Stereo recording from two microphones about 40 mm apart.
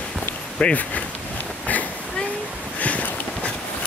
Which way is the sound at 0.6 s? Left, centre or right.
Left.